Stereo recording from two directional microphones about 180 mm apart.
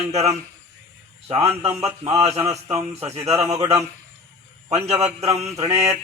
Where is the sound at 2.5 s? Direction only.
35° right (ahead or behind).